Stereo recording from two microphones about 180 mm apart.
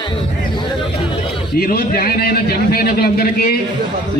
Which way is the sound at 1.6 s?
55° left (ahead or behind).